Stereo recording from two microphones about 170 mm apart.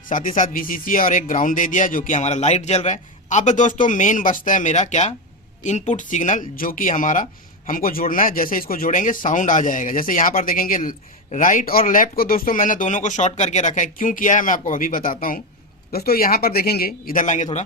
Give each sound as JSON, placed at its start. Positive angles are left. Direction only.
{"t": 0.1, "sound": "a man's voice", "side_deg": 50}